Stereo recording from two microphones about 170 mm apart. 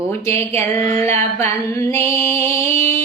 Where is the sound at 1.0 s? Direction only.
15° left (ahead or behind).